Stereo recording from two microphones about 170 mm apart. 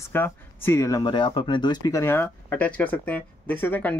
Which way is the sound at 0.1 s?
15° left (ahead or behind).